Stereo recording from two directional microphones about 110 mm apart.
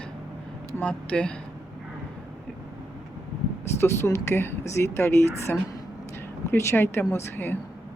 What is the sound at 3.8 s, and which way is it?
Speech, 25° left (ahead or behind).